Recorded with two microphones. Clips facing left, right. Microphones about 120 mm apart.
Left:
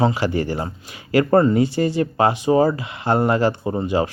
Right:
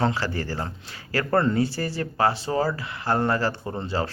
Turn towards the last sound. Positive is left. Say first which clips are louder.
# left 7 dB
turn(degrees=15)  # may be behind; listen again after turning